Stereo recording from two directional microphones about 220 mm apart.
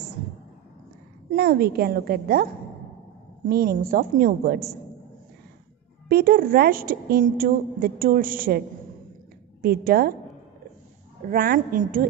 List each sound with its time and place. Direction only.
1.3 s a woman's voice: 45° right (ahead or behind)
3.4 s a woman's voice: 45° right (ahead or behind)
6.0 s a woman's voice: 45° right (ahead or behind)
11.2 s a woman's voice: 45° right (ahead or behind)